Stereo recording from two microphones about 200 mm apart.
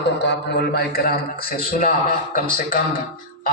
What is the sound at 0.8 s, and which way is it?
Speech, 50° left (ahead or behind).